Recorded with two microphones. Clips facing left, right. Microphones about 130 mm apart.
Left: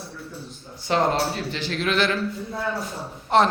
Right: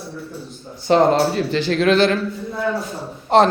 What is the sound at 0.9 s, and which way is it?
A man's voice, 35° right (ahead or behind).